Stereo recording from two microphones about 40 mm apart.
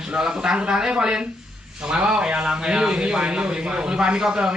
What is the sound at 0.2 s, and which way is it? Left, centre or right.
A man's voice, centre.